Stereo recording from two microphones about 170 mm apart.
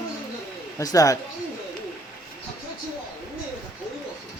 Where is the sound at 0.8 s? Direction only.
20° left (ahead or behind).